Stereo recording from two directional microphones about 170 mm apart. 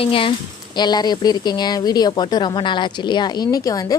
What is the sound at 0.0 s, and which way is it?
Speech, 30° left (ahead or behind).